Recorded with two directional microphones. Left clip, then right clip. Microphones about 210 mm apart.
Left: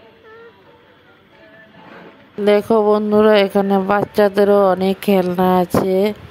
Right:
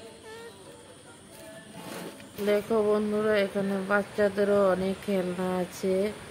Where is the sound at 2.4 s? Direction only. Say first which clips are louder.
Left 12 dB; 40° left (ahead or behind).